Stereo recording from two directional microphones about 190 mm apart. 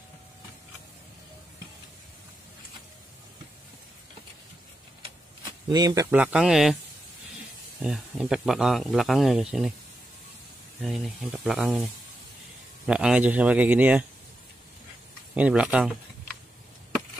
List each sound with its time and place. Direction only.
5.7 s speech: 20° right (ahead or behind)
6.2 s speech: 5° right (ahead or behind)
7.8 s speech: centre (ahead or behind)
10.8 s speech: centre (ahead or behind)
12.8 s speech: 5° right (ahead or behind)
15.3 s speech: 5° right (ahead or behind)